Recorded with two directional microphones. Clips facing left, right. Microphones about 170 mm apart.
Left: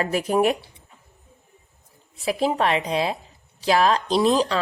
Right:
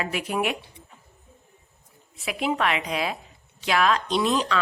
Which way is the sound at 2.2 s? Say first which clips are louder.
Left 4 dB; 35° left (ahead or behind).